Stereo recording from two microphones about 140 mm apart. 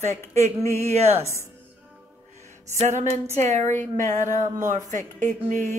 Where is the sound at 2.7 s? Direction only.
60° right (ahead or behind).